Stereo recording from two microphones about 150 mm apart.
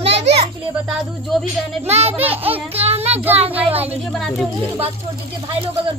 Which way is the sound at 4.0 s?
Centre (ahead or behind).